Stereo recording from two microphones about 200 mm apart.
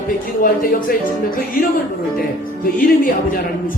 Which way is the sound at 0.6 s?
45° left (ahead or behind).